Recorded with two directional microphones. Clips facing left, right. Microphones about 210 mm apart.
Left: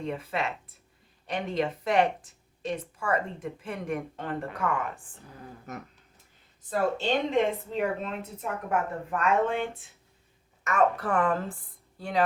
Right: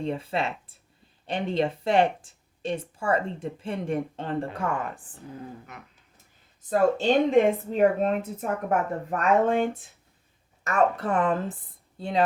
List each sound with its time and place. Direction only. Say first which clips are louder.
0.0 s speech: right 3 dB; 30° right (ahead or behind)
5.7 s speech: left 6 dB; 45° left (ahead or behind)
6.7 s speech: right 5 dB; 45° right (ahead or behind); by 12.2 s 25° right (ahead or behind)